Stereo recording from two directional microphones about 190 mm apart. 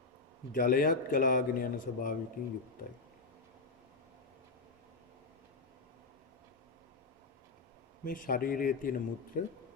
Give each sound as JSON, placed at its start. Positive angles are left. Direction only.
{"t": 0.5, "sound": "speech", "side_deg": 50}
{"t": 8.0, "sound": "speech", "side_deg": 50}